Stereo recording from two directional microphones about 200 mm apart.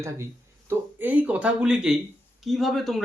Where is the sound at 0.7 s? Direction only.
10° right (ahead or behind).